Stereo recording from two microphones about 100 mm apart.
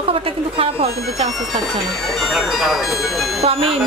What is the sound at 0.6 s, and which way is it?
Speech, 90° right.